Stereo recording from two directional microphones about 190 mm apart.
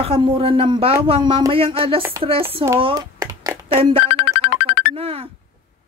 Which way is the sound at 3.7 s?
30° right (ahead or behind).